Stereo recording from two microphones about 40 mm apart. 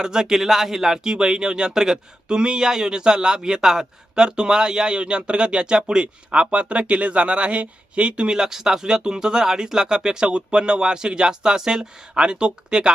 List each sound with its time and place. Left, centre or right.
0.0 s speech: centre